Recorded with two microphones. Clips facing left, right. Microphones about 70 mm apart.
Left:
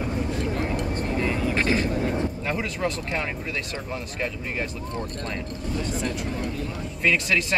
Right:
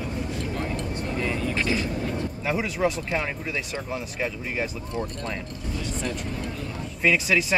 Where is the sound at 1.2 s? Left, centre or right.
Centre.